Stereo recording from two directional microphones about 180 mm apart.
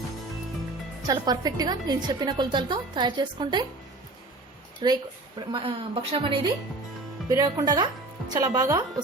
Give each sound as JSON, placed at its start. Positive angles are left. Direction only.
{"t": 1.0, "sound": "a woman's voice", "side_deg": -20}
{"t": 4.8, "sound": "a woman's voice", "side_deg": -25}
{"t": 7.3, "sound": "a woman's voice", "side_deg": -20}